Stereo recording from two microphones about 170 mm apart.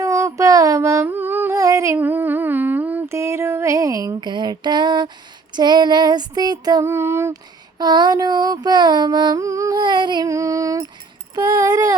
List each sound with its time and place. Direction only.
0.0 s a sound: 20° right (ahead or behind)
5.5 s mantra: 25° right (ahead or behind)
11.3 s child singing: 20° right (ahead or behind)